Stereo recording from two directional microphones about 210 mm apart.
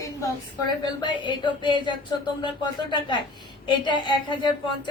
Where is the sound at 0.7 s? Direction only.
20° left (ahead or behind).